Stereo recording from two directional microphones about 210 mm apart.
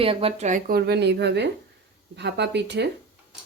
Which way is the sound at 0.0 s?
25° right (ahead or behind).